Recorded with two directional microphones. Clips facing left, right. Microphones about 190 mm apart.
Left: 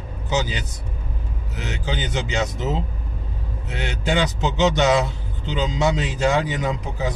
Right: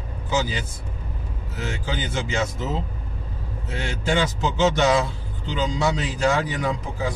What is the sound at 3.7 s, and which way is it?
A man's voice, 20° left (ahead or behind).